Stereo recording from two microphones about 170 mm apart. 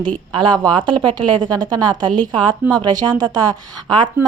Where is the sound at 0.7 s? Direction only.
25° right (ahead or behind).